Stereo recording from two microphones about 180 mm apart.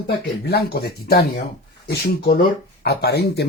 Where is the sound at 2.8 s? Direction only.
65° left (ahead or behind).